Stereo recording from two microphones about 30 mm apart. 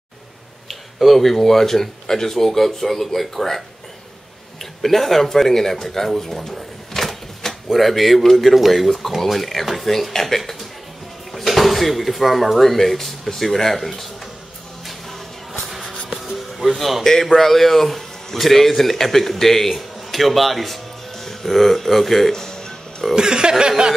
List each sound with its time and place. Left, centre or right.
0.7 s speech: centre
4.8 s speech: centre
14.9 s music: centre
17.1 s a man's voice: centre
22.3 s music: centre
23.1 s speech: right